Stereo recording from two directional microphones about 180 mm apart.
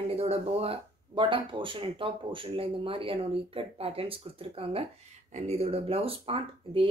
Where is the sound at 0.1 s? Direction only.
35° right (ahead or behind).